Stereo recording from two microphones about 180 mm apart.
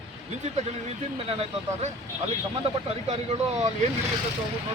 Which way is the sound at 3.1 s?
40° right (ahead or behind).